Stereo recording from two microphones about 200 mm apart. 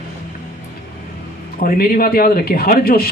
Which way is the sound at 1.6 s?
50° left (ahead or behind).